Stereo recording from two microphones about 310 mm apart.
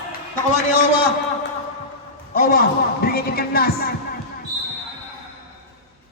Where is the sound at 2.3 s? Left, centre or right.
Left.